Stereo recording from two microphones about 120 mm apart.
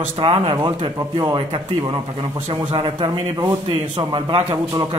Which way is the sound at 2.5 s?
40° right (ahead or behind).